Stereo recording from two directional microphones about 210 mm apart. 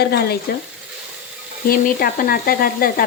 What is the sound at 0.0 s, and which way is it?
Stir, 50° left (ahead or behind).